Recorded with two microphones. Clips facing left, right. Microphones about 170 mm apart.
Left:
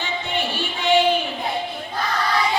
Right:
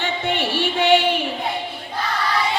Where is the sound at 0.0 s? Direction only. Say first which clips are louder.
Right 3 dB; 70° right (ahead or behind).